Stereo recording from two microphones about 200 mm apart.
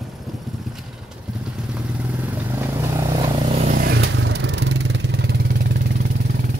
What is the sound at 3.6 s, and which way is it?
Vehicle, 45° right (ahead or behind).